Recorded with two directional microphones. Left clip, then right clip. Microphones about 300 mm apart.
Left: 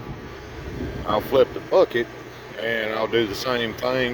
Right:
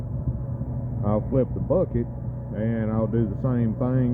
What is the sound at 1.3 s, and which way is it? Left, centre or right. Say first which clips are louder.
Speech: left 7 dB; centre.